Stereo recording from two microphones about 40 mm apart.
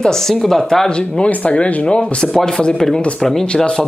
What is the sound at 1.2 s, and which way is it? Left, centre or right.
Speech, left.